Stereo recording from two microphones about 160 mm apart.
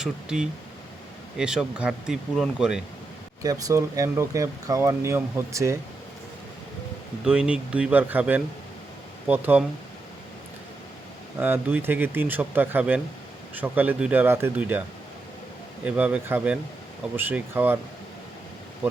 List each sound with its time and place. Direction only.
0.0 s speech: 5° right (ahead or behind)
3.4 s speech: 20° right (ahead or behind)
7.3 s speech: 5° right (ahead or behind)
11.3 s speech: 10° right (ahead or behind)